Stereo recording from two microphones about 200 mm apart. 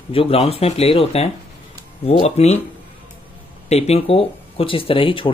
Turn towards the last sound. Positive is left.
turn(degrees=25)  # may be behind; listen again after turning